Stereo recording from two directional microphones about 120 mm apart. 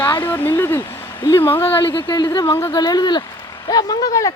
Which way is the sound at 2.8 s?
35° left (ahead or behind).